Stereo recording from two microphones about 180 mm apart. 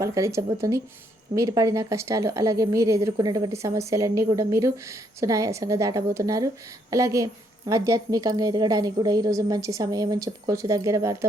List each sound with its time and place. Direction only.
0.0 s a woman's voice: 15° right (ahead or behind)